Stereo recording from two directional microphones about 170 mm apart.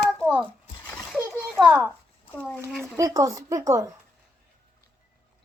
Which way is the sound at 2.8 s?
20° right (ahead or behind).